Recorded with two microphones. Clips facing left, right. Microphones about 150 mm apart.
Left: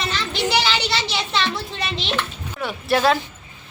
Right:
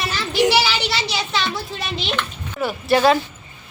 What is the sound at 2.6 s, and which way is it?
Speech, centre (ahead or behind).